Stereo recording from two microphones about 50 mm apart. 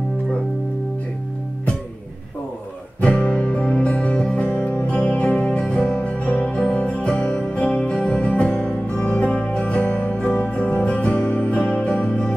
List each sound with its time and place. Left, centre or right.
3.0 s music: left